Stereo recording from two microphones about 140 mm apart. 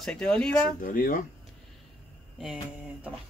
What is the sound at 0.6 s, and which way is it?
Speech, 85° left.